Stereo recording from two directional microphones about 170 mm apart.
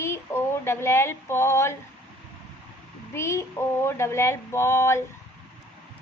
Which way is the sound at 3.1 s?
15° left (ahead or behind).